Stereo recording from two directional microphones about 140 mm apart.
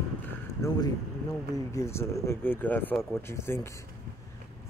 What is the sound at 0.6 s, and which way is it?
Speech, 20° left (ahead or behind).